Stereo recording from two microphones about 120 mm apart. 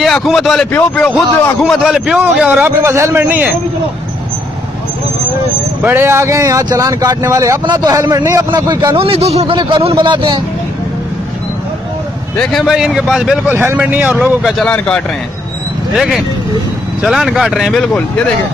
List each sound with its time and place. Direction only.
0.0 s a man's voice: centre (ahead or behind)
0.7 s speech: 10° left (ahead or behind)
1.6 s a man's voice: 5° right (ahead or behind)
2.6 s speech: 25° right (ahead or behind)
5.8 s a man's voice: 15° right (ahead or behind); by 9.6 s 60° right (ahead or behind)
9.6 s a man's voice: 35° right (ahead or behind)
12.4 s a man's voice: centre (ahead or behind)
13.5 s speech: 20° right (ahead or behind)
14.1 s a man's voice: centre (ahead or behind)
14.7 s speech: 10° left (ahead or behind)
15.9 s a man's voice: 5° right (ahead or behind)
17.8 s speech: 10° left (ahead or behind)